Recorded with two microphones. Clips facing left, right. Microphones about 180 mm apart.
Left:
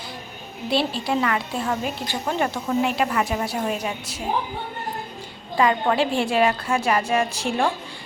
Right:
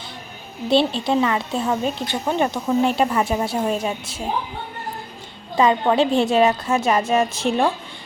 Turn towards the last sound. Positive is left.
turn(degrees=-20)  # may be behind; listen again after turning